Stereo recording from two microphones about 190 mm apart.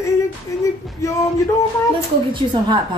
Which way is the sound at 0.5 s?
15° left (ahead or behind).